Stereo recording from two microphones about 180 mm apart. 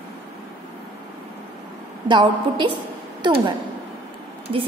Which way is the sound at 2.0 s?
25° right (ahead or behind).